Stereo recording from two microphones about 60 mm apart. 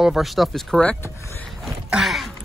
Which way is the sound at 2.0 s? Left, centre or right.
Centre.